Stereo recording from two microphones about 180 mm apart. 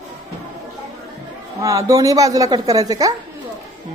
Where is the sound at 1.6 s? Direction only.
15° right (ahead or behind).